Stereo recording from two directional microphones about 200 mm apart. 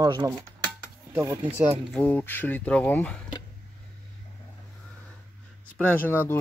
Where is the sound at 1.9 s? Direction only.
10° left (ahead or behind).